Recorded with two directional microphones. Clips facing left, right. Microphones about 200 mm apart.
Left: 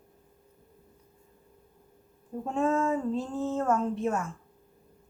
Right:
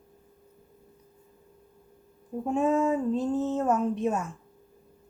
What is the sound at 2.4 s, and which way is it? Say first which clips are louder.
Speech: right 2 dB; 15° right (ahead or behind).